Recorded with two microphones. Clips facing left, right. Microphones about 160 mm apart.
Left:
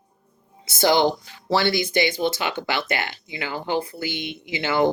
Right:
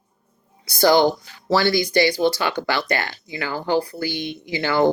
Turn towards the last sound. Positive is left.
turn(degrees=20)  # may be behind; listen again after turning